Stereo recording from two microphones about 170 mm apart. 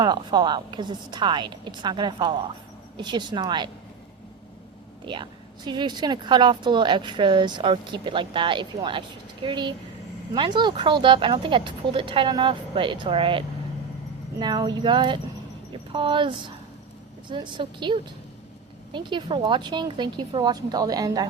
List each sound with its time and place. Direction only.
0.0 s a woman's voice: 25° right (ahead or behind)
5.0 s a woman's voice: 30° right (ahead or behind)